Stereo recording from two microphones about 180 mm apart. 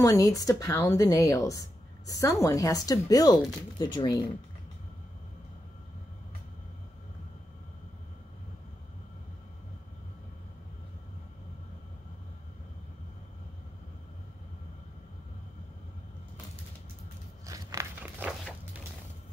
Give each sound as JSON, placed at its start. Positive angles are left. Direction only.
{"t": 0.0, "sound": "speech", "side_deg": 20}
{"t": 1.6, "sound": "a sound", "side_deg": 20}
{"t": 2.4, "sound": "speech", "side_deg": 20}
{"t": 17.5, "sound": "biting", "side_deg": -20}